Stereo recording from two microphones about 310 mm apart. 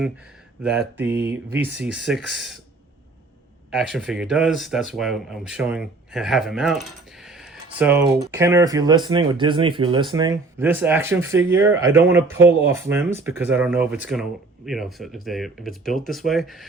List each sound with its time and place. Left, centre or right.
0.6 s speech: centre
3.7 s speech: centre